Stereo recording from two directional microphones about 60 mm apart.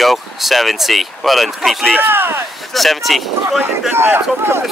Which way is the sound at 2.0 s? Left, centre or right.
Right.